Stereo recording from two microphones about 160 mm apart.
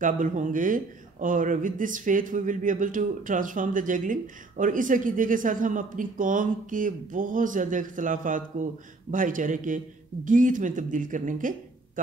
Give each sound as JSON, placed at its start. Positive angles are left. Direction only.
{"t": 0.0, "sound": "speech", "side_deg": -55}